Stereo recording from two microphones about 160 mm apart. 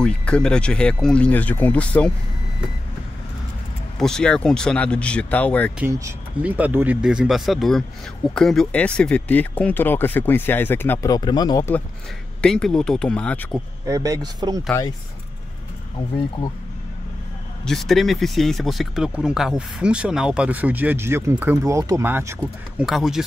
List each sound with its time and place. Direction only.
0.0 s speech: 5° left (ahead or behind)
4.0 s speech: 5° left (ahead or behind)
5.8 s speech: 15° right (ahead or behind); by 11.1 s 15° left (ahead or behind)
11.1 s speech: 25° left (ahead or behind)
12.4 s speech: 5° left (ahead or behind)
13.8 s speech: 20° right (ahead or behind)
17.6 s speech: centre (ahead or behind); by 22.4 s 15° right (ahead or behind)
22.8 s speech: centre (ahead or behind)